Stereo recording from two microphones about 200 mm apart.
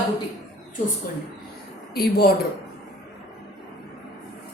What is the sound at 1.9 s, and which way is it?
Speech, 50° left (ahead or behind).